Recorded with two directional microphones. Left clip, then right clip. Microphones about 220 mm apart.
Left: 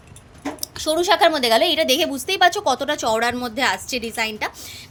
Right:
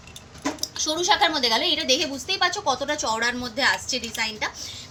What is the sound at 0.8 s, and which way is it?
A woman's voice, 55° left (ahead or behind).